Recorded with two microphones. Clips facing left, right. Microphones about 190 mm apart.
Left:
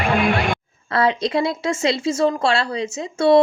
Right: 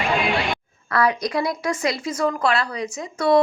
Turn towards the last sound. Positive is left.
turn(degrees=30)  # may be behind; listen again after turning